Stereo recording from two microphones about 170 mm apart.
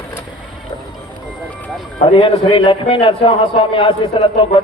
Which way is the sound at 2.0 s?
30° left (ahead or behind).